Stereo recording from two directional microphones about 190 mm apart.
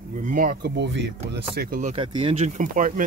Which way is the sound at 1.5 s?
45° right (ahead or behind).